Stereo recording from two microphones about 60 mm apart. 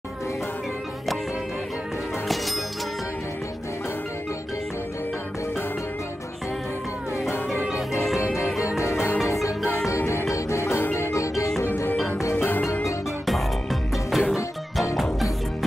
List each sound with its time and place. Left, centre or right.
2.2 s music: centre
7.2 s music: left
8.7 s music: left
10.8 s music: left
11.1 s music: left
11.6 s music: left
13.3 s music: centre